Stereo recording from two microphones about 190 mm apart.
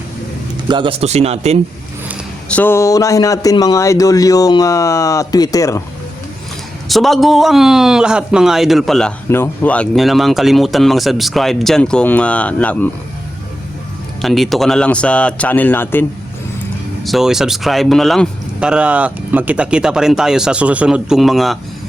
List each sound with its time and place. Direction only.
0.7 s speech: 25° right (ahead or behind)
2.5 s a man's voice: 10° left (ahead or behind)
6.8 s a man's voice: centre (ahead or behind)
14.2 s a man's voice: centre (ahead or behind)
17.0 s a man's voice: centre (ahead or behind)